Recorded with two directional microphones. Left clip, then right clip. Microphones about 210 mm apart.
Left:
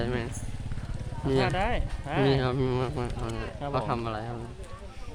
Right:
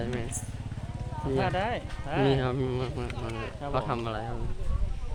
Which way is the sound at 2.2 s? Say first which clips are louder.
Left 1 dB; 10° left (ahead or behind).